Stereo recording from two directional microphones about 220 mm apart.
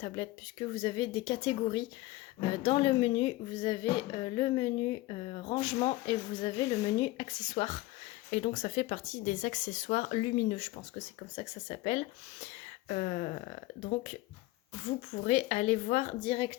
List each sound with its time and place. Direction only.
0.2 s a woman's voice: 25° left (ahead or behind)
15.2 s a woman's voice: 30° left (ahead or behind)